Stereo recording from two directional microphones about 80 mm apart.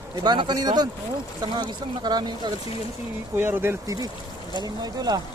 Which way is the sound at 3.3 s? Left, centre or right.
Right.